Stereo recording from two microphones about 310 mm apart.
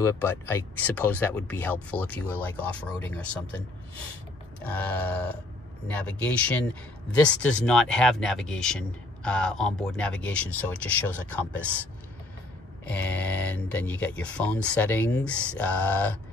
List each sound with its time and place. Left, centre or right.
0.0 s speech: centre